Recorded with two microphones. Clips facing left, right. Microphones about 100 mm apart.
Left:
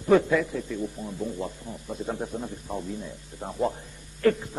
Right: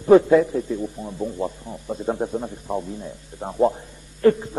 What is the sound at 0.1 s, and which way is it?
A man's voice, 25° right (ahead or behind).